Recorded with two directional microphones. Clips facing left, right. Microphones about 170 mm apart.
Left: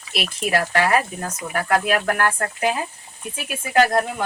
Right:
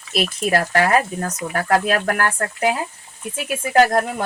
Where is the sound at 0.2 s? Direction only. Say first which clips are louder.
Right 3 dB; 40° right (ahead or behind).